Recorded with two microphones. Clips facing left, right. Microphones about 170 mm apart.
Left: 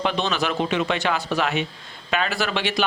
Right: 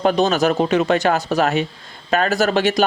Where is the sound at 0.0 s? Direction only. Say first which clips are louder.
Right 8 dB; 45° right (ahead or behind).